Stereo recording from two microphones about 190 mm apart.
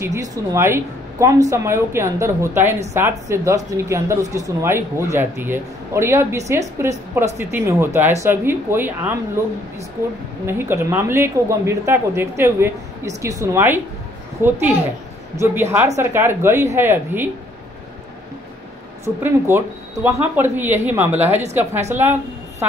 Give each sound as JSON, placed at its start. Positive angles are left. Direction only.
{"t": 0.0, "sound": "speech", "side_deg": -15}
{"t": 10.4, "sound": "speech", "side_deg": -15}
{"t": 19.0, "sound": "a woman's voice", "side_deg": -10}